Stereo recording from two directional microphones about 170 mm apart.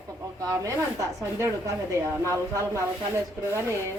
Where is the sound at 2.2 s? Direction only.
15° right (ahead or behind).